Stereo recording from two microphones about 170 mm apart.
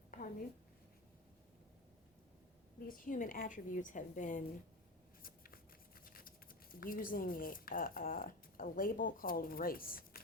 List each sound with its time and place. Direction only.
2.8 s a woman's voice: 55° left (ahead or behind)
5.2 s shuffling cards: 60° left (ahead or behind)
6.1 s speech: 55° left (ahead or behind)